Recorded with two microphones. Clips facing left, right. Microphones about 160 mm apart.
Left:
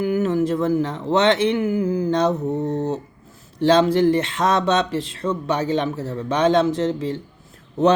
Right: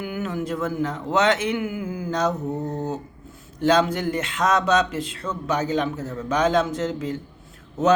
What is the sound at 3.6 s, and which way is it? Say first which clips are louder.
Speech: left 4 dB; 30° left (ahead or behind).